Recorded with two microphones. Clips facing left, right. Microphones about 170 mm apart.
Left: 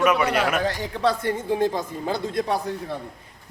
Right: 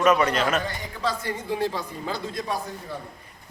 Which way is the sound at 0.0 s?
10° left (ahead or behind).